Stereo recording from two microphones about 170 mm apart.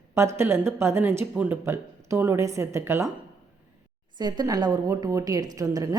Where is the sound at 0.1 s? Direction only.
15° right (ahead or behind).